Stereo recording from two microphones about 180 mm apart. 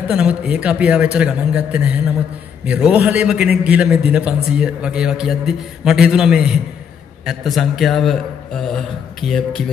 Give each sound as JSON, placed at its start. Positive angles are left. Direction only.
{"t": 0.1, "sound": "a man's voice", "side_deg": -5}